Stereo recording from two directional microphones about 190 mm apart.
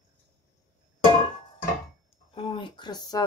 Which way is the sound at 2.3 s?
25° left (ahead or behind).